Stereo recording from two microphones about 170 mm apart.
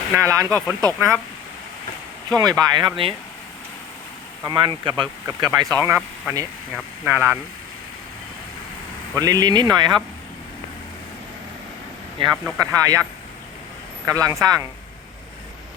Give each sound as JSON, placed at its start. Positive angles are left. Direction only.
{"t": 0.1, "sound": "speech", "side_deg": -20}
{"t": 2.3, "sound": "speech", "side_deg": -20}
{"t": 4.4, "sound": "speech", "side_deg": -30}
{"t": 9.1, "sound": "speech", "side_deg": -20}
{"t": 12.2, "sound": "speech", "side_deg": -30}
{"t": 12.5, "sound": "speech", "side_deg": -20}